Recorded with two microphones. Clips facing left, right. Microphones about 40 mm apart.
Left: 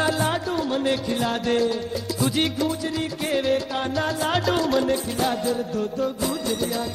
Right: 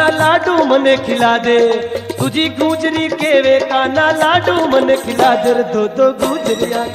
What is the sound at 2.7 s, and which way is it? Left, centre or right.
Music, right.